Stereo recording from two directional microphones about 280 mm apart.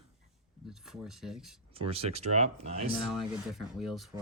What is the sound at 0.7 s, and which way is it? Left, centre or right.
Speech, centre.